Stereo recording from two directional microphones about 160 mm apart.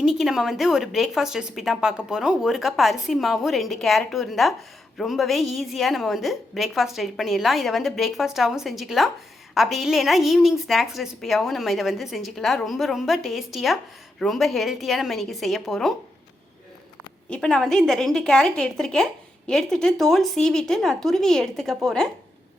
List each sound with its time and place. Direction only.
0.0 s a woman's voice: centre (ahead or behind)
17.2 s a woman's voice: 5° left (ahead or behind)